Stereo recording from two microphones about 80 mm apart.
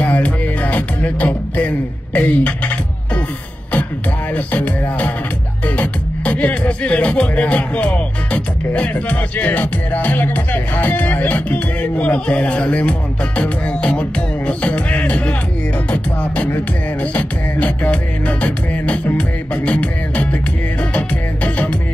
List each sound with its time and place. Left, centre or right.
0.0 s music: centre
2.1 s beatboxing: centre
4.5 s music: centre
5.8 s beatboxing: centre
13.4 s music: centre
15.9 s beatboxing: centre